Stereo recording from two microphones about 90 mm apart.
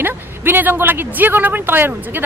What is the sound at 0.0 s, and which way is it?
Speech, 20° right (ahead or behind).